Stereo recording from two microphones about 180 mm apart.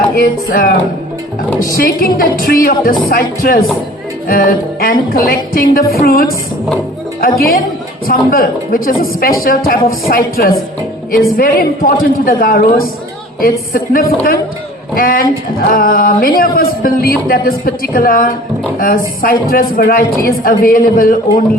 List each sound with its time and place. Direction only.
0.2 s speech: 55° left (ahead or behind)
4.3 s music: 55° left (ahead or behind)
8.0 s speech: 55° left (ahead or behind)
10.1 s music: 55° left (ahead or behind)
15.7 s speech: 50° left (ahead or behind)